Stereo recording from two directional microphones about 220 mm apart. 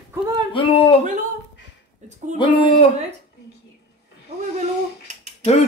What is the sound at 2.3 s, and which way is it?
Speech, 25° left (ahead or behind).